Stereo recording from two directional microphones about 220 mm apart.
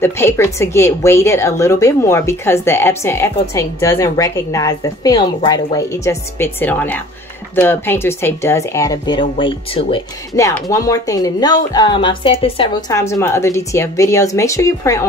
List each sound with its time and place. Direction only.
0.0 s a woman's voice: 10° left (ahead or behind)
13.1 s a woman's voice: 10° left (ahead or behind)